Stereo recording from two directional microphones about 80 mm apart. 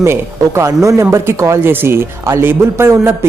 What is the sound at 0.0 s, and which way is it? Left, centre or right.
A man's voice, right.